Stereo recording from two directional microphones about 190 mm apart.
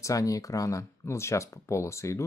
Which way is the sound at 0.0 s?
15° left (ahead or behind).